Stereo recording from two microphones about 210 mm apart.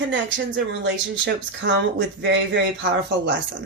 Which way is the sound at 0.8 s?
60° right (ahead or behind).